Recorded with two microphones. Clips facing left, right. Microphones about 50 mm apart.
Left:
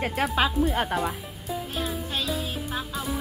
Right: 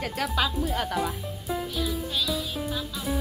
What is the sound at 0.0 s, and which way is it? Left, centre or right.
Speech, left.